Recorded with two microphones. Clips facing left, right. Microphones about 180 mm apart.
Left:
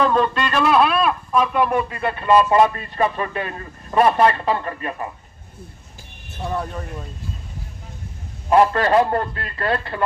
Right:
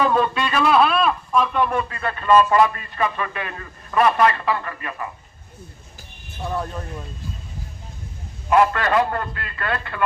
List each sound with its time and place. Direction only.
0.0 s speech: 5° right (ahead or behind); by 5.0 s 35° left (ahead or behind)
6.4 s speech: centre (ahead or behind)
8.4 s a man's voice: 30° left (ahead or behind)